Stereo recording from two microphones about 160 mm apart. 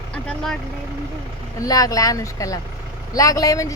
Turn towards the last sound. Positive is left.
turn(degrees=20)  # may be behind; listen again after turning